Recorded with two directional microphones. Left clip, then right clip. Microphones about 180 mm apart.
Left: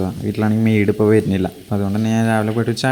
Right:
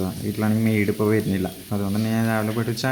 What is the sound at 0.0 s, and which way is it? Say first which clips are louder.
Speech: left 5 dB; 25° left (ahead or behind).